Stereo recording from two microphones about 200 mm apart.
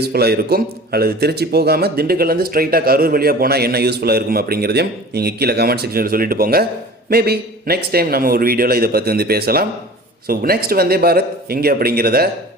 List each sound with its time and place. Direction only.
0.0 s a man's voice: 50° right (ahead or behind)